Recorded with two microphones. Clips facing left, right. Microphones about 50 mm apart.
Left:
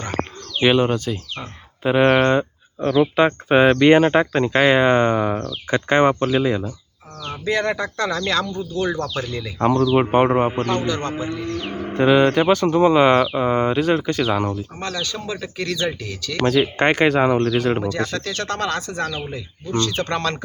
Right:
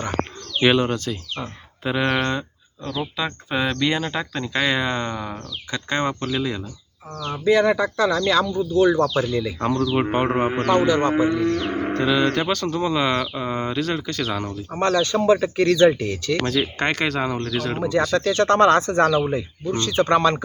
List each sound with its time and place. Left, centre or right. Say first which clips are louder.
0.8 s speech: left 3 dB; centre
1.8 s speech: left 6 dB; left
3.2 s speech: left 9 dB; left
7.3 s speech: right 4 dB; centre
9.6 s speech: left 7 dB; centre
10.7 s speech: right 5 dB; centre
11.7 s music: right 4 dB; right
11.9 s speech: left 6 dB; left
14.8 s speech: right 8 dB; right
16.4 s speech: left 10 dB; centre
18.2 s speech: right 8 dB; right
19.3 s speech: right 2 dB; right